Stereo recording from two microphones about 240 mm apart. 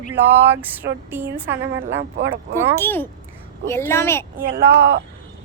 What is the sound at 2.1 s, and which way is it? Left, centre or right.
Speech, right.